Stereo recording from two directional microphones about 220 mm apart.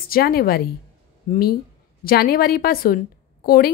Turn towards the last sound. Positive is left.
turn(degrees=45)  # may be behind; listen again after turning